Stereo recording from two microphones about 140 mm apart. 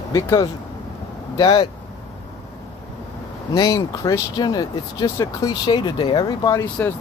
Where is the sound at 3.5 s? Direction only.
25° left (ahead or behind).